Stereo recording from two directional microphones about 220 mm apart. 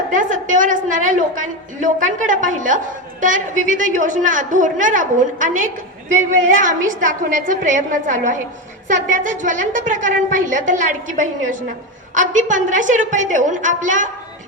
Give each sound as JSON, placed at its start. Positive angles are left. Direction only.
{"t": 0.1, "sound": "a woman's voice", "side_deg": -35}